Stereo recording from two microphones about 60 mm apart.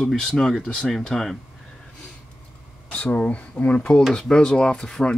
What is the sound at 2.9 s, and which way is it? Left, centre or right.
Speech, left.